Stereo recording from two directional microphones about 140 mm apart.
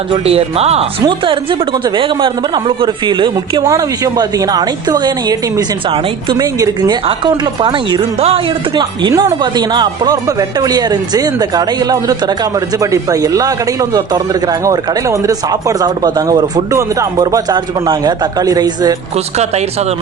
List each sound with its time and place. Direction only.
0.3 s speech: 45° right (ahead or behind)
3.6 s speech: 25° right (ahead or behind)
5.9 s speech: 40° right (ahead or behind)
6.4 s speech: 30° right (ahead or behind)
8.7 s speech: 30° right (ahead or behind)
19.1 s speech: 50° right (ahead or behind)